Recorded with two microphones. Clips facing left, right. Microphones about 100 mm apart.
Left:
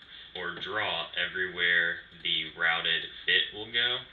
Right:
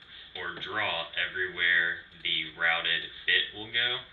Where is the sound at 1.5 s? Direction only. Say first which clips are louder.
Even; 15° left (ahead or behind).